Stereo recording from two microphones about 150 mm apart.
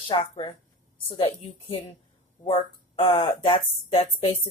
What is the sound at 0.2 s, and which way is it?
Speech, 35° left (ahead or behind).